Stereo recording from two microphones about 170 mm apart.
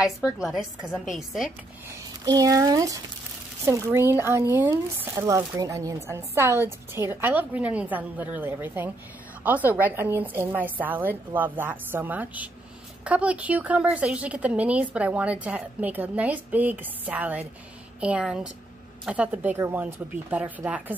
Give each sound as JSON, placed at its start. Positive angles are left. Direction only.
{"t": 0.2, "sound": "a woman's voice", "side_deg": -5}
{"t": 2.2, "sound": "a woman's voice", "side_deg": -20}